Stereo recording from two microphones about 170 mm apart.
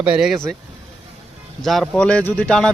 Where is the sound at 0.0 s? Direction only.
5° right (ahead or behind).